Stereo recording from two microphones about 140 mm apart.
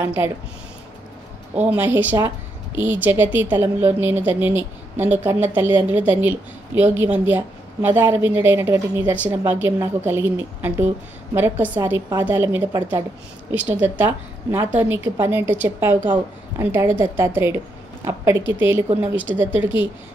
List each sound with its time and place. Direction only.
0.0 s a woman's voice: 15° right (ahead or behind)
1.5 s a woman's voice: 10° right (ahead or behind)